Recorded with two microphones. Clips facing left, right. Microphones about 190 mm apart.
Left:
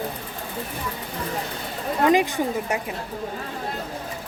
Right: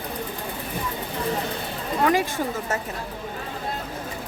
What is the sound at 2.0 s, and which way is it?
Speech, 20° left (ahead or behind).